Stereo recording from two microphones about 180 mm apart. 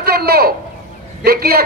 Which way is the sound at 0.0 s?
60° right (ahead or behind).